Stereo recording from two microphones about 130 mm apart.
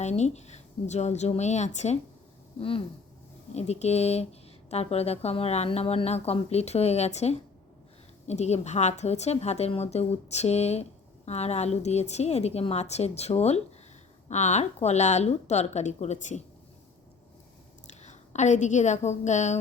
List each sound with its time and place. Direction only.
0.0 s speech: 60° left (ahead or behind)
2.6 s a sound: 45° left (ahead or behind)
3.5 s speech: 55° left (ahead or behind)
17.8 s a woman's voice: 60° left (ahead or behind)